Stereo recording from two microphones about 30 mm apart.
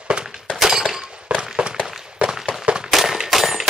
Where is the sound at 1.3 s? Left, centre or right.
Right.